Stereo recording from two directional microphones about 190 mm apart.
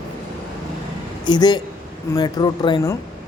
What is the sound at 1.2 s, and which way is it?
A man's voice, 20° left (ahead or behind).